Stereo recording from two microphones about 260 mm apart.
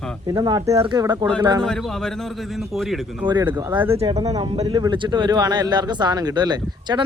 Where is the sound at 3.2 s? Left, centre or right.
Centre.